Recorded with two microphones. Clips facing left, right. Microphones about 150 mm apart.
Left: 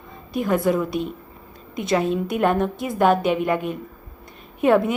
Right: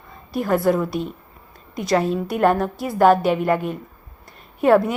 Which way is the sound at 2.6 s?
20° left (ahead or behind).